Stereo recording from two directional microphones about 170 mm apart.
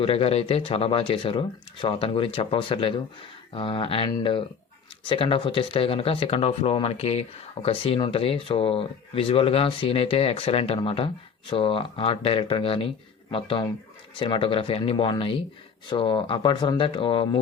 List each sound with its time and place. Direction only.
0.0 s speech: 35° left (ahead or behind)